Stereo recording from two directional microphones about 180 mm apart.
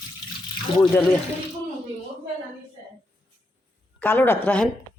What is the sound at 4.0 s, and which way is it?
Speech, 10° left (ahead or behind).